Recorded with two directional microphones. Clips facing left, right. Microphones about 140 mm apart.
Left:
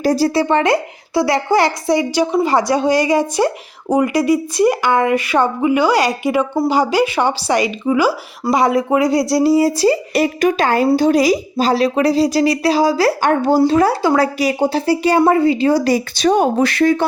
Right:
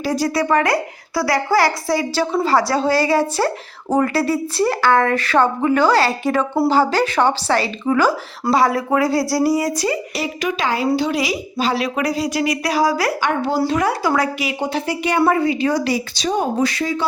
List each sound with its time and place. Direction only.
0.0 s a woman's voice: 40° left (ahead or behind)
0.3 s a woman's voice: 25° left (ahead or behind)
10.2 s a woman's voice: 50° left (ahead or behind); by 13.1 s 30° left (ahead or behind)
13.2 s a woman's voice: 45° left (ahead or behind)
13.6 s a woman's voice: 30° left (ahead or behind)
15.9 s speech: 60° left (ahead or behind)